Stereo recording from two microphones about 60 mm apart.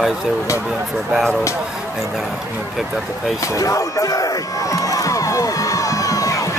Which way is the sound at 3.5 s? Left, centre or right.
Left.